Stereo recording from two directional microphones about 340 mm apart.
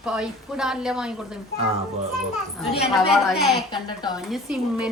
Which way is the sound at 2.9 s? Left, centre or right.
Centre.